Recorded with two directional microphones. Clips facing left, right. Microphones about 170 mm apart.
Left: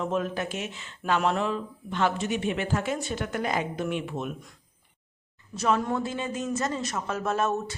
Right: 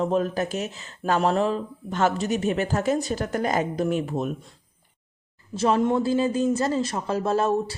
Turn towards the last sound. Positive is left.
turn(degrees=-30)  # may be behind; listen again after turning